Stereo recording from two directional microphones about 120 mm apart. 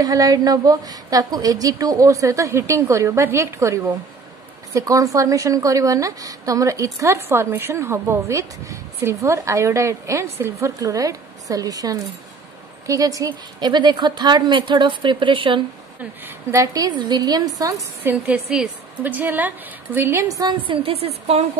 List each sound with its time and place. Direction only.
0.0 s a woman's voice: 30° right (ahead or behind)
16.3 s a woman's voice: 25° right (ahead or behind)
18.0 s a woman's voice: 10° right (ahead or behind); by 20.5 s 30° right (ahead or behind)
20.5 s a woman's voice: 45° right (ahead or behind)